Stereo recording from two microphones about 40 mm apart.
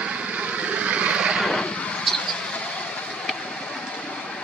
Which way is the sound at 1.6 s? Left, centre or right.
Left.